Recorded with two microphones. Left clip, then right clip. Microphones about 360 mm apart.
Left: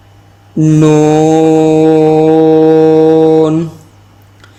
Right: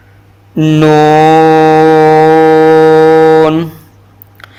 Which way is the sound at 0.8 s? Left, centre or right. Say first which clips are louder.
Right 3 dB; right.